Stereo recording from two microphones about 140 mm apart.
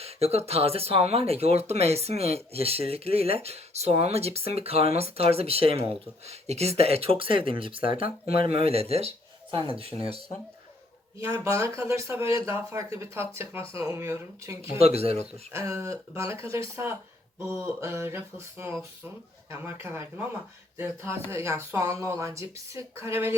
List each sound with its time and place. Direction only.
0.0 s a man's voice: 45° right (ahead or behind)
11.2 s speech: 20° right (ahead or behind)
14.8 s speech: 45° right (ahead or behind)
15.5 s speech: 20° right (ahead or behind)